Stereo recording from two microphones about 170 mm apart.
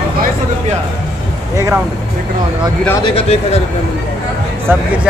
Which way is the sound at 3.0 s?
35° left (ahead or behind).